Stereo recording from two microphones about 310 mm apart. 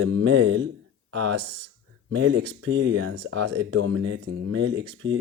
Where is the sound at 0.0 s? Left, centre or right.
Right.